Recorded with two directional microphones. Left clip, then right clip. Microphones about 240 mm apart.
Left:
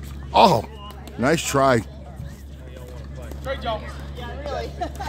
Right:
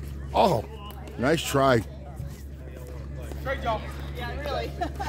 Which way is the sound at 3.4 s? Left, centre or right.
Left.